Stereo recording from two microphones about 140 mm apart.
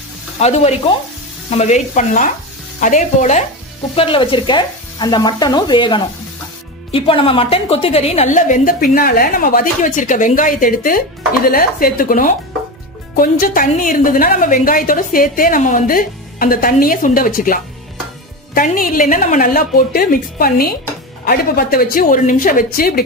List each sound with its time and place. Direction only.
0.4 s speech: 50° left (ahead or behind)
3.9 s a woman's voice: 40° left (ahead or behind); by 11.0 s 75° left (ahead or behind)
11.4 s a woman's voice: 90° left